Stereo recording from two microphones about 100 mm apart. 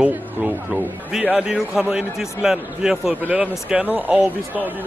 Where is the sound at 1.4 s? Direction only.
5° right (ahead or behind).